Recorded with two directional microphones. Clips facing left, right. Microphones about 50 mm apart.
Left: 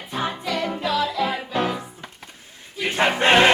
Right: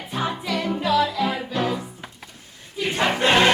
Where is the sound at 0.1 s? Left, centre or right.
Centre.